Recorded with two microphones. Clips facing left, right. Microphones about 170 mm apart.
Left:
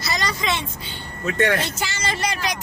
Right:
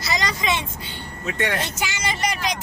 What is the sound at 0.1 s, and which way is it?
Vehicle, 15° right (ahead or behind).